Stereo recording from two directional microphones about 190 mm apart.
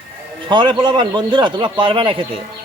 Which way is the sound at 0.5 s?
25° right (ahead or behind).